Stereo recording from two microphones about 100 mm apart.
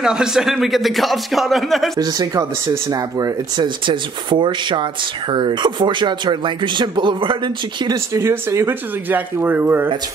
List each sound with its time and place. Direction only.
0.0 s speech: 5° right (ahead or behind)
2.0 s speech: 40° right (ahead or behind)
3.6 s speech: 55° right (ahead or behind)
7.9 s speech: 30° right (ahead or behind)